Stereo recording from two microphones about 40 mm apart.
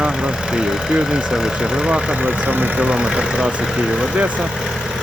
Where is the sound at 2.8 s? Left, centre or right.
Right.